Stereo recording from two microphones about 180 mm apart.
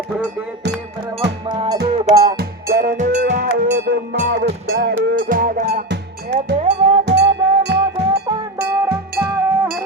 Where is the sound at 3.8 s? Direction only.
70° right (ahead or behind).